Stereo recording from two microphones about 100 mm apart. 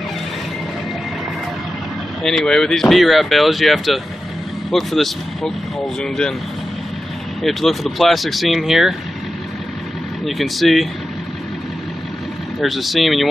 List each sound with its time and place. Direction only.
2.2 s speech: 5° left (ahead or behind)
7.4 s speech: centre (ahead or behind)
10.2 s speech: centre (ahead or behind)
12.5 s speech: centre (ahead or behind)